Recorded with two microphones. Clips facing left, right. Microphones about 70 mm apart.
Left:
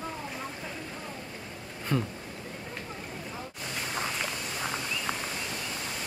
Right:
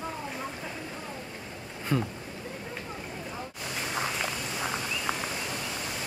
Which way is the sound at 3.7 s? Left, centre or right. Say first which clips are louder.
Right 2 dB; centre.